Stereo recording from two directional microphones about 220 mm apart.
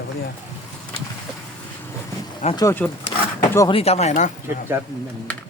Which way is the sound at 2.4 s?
20° left (ahead or behind).